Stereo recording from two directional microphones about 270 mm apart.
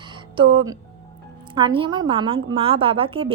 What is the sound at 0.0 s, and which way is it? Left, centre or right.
Music, centre.